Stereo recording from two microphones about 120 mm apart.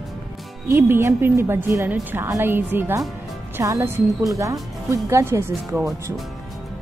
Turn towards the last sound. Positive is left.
turn(degrees=-25)  # may be behind; listen again after turning